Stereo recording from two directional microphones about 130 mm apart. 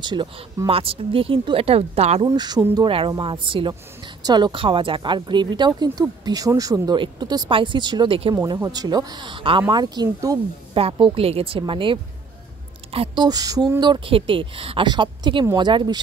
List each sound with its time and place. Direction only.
0.0 s speech: 35° right (ahead or behind); by 2.2 s 55° right (ahead or behind)
2.2 s speech: 30° right (ahead or behind)
8.6 s speech: 30° right (ahead or behind)
10.7 s a woman's voice: 45° right (ahead or behind)
13.2 s speech: 30° right (ahead or behind)